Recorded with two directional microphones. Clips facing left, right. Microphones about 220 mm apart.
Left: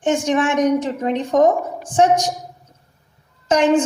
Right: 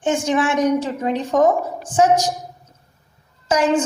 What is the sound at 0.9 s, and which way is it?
Speech, 35° left (ahead or behind).